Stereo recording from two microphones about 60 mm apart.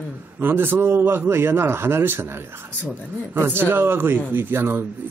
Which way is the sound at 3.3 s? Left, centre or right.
Right.